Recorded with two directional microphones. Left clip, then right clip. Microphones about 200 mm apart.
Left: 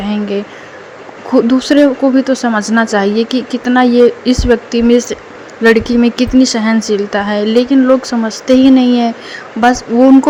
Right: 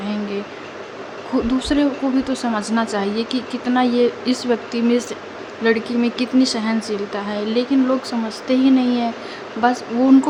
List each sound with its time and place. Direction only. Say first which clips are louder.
1.3 s speech: left 10 dB; 30° left (ahead or behind)